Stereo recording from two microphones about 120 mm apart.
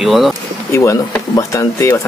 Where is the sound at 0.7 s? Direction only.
25° left (ahead or behind).